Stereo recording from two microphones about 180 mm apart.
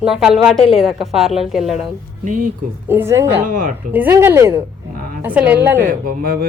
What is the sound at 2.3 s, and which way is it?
Speech, 45° right (ahead or behind).